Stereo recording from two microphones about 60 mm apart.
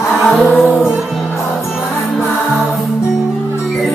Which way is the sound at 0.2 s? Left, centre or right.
Centre.